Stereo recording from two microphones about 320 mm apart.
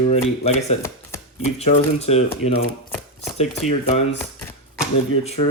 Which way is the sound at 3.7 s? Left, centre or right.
Centre.